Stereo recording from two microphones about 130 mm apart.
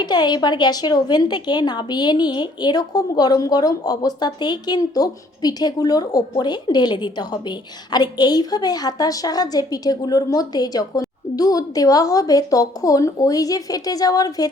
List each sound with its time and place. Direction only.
0.0 s a woman's voice: 35° left (ahead or behind)